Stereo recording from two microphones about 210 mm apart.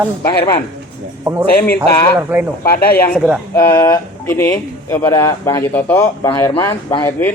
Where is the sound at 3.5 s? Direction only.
10° left (ahead or behind).